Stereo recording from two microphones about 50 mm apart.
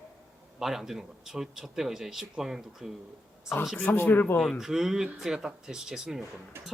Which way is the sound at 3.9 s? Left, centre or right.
Left.